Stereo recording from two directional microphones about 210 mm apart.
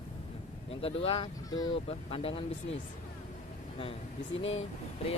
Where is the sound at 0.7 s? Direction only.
25° left (ahead or behind).